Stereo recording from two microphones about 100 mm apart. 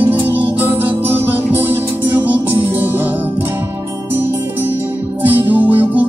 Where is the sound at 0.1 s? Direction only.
20° right (ahead or behind).